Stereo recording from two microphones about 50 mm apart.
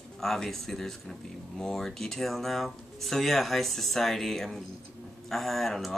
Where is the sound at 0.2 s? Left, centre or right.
Centre.